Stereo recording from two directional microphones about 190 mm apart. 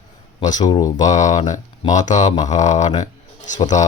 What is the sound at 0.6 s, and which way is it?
Speech, 20° left (ahead or behind).